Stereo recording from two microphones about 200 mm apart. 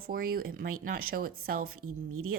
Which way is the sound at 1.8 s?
90° right.